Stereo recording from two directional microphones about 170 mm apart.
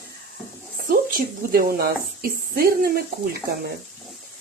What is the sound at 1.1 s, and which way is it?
Speech, 60° right (ahead or behind).